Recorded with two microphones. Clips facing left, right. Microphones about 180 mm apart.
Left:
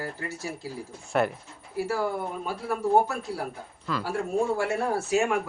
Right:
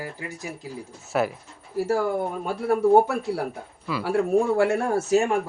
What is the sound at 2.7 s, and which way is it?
Speech, 60° right (ahead or behind).